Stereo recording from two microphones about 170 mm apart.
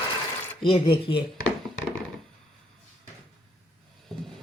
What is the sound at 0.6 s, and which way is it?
Speech, 30° left (ahead or behind).